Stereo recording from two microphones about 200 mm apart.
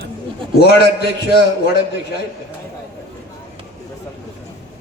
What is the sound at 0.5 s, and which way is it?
Speech, 55° left (ahead or behind).